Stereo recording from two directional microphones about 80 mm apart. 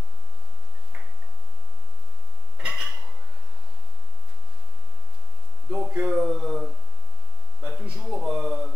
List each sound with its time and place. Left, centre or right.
2.7 s dishes: centre
5.7 s speech: centre
6.0 s speech: centre